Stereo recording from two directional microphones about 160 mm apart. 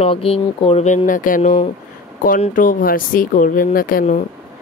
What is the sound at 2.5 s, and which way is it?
Speech, 55° left (ahead or behind).